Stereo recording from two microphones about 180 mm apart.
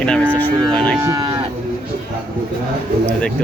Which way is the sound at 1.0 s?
20° right (ahead or behind).